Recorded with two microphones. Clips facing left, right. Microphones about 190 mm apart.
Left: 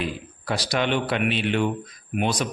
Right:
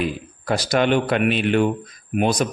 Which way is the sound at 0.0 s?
50° right (ahead or behind).